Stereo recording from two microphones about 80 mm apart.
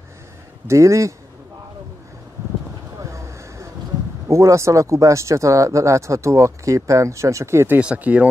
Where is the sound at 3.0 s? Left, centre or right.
Right.